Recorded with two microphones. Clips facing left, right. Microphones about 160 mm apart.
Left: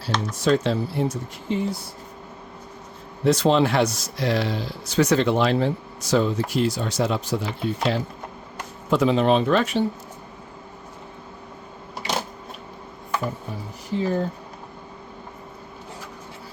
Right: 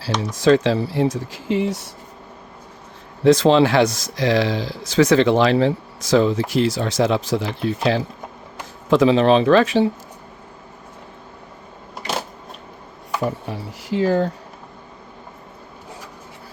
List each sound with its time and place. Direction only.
0.2 s speech: 90° right
3.2 s speech: 90° right
13.2 s speech: 75° right (ahead or behind)